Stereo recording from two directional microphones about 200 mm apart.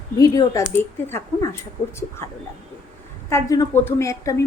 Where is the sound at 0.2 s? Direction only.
15° left (ahead or behind).